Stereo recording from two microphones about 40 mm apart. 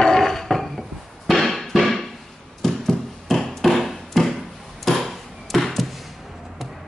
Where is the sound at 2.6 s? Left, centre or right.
Centre.